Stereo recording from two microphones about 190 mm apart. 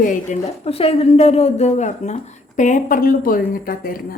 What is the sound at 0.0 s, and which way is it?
A woman's voice, 40° left (ahead or behind).